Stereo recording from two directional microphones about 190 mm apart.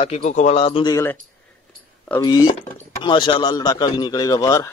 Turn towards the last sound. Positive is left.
turn(degrees=20)  # may be behind; listen again after turning